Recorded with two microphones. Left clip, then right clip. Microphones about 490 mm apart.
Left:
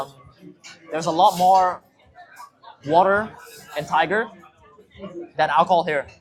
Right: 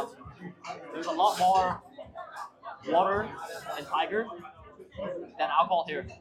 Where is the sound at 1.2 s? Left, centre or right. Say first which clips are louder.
Left 8 dB; left.